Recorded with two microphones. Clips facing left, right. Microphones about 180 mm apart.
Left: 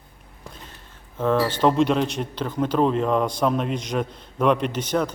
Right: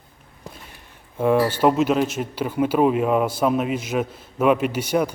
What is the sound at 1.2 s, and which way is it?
A man's voice, 10° right (ahead or behind).